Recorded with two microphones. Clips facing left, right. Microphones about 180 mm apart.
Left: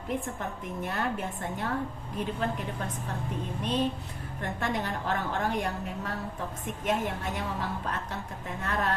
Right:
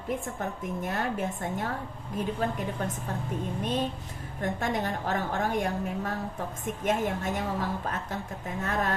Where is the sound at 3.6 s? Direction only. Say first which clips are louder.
Left 3 dB; 45° right (ahead or behind).